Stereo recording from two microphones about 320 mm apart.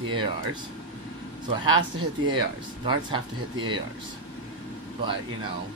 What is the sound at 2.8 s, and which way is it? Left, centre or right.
Speech, centre.